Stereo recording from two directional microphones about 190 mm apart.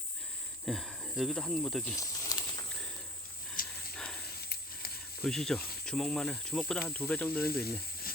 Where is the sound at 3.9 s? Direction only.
5° left (ahead or behind).